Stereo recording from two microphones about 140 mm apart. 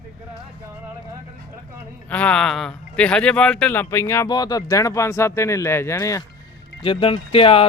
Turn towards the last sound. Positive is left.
turn(degrees=45)  # may be behind; listen again after turning